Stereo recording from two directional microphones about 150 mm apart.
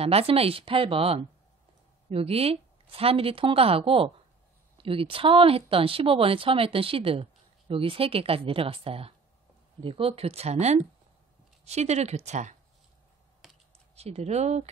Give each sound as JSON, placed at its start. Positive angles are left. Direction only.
{"t": 0.0, "sound": "speech", "side_deg": -40}
{"t": 13.4, "sound": "computer keyboard", "side_deg": 0}
{"t": 13.9, "sound": "speech", "side_deg": -45}